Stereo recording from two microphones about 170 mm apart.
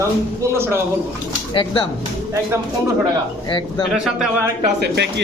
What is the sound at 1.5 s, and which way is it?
Speech, 30° left (ahead or behind).